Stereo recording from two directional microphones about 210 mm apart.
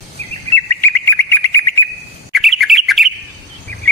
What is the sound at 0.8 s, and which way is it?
Bird, 10° left (ahead or behind).